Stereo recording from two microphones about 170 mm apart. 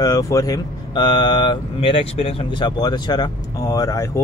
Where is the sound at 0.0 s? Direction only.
20° left (ahead or behind).